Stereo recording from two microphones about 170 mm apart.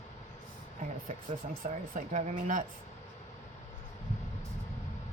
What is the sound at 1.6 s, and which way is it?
Speech, 50° right (ahead or behind).